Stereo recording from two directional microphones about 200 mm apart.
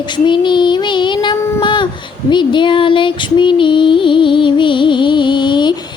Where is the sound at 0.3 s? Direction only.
25° left (ahead or behind).